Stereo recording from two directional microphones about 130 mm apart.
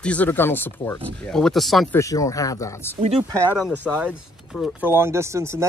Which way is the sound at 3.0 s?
50° right (ahead or behind).